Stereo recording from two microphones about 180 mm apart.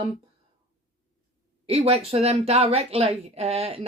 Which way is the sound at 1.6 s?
35° right (ahead or behind).